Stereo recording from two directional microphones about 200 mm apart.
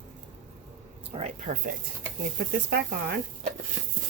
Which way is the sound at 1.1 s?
35° right (ahead or behind).